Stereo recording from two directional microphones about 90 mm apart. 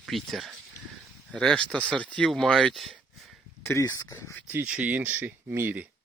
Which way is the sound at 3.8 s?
40° left (ahead or behind).